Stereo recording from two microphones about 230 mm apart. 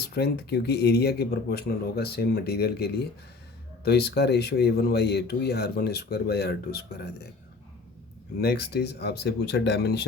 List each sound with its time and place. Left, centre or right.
0.0 s speech: left
8.4 s speech: left